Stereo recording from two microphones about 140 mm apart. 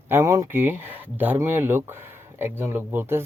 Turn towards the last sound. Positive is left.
turn(degrees=-15)  # may be behind; listen again after turning